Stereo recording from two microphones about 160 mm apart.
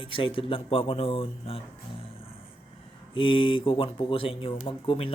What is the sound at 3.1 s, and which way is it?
Speech, 35° left (ahead or behind).